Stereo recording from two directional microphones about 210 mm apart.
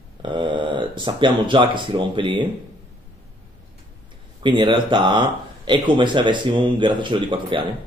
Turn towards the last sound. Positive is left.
turn(degrees=-25)  # may be behind; listen again after turning